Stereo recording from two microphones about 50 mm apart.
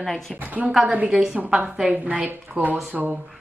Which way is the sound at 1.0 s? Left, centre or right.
Centre.